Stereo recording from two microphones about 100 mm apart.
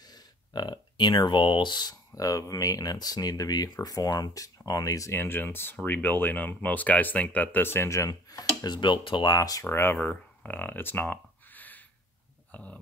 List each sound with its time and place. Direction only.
0.1 s speech: 45° left (ahead or behind)
9.7 s speech: 25° left (ahead or behind)
9.9 s a sound: 15° left (ahead or behind)